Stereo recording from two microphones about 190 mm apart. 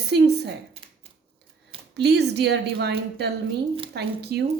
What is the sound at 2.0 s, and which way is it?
A woman's voice, 60° right (ahead or behind).